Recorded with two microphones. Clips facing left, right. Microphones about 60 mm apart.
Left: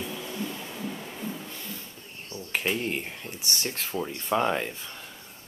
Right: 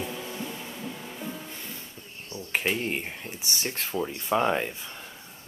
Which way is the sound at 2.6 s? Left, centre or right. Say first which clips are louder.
Left 1 dB; centre.